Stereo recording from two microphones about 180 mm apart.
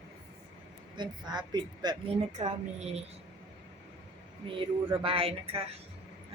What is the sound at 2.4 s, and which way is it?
Speech, 35° right (ahead or behind).